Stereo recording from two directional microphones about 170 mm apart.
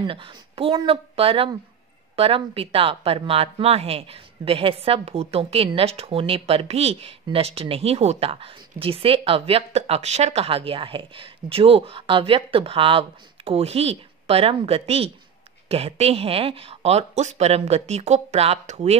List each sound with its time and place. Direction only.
0.0 s speech: 30° right (ahead or behind)